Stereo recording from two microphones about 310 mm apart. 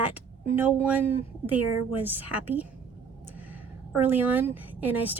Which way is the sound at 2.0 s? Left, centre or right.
Centre.